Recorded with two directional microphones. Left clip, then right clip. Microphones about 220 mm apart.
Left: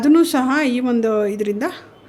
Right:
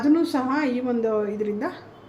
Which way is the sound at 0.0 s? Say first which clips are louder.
Left 7 dB; 50° left (ahead or behind).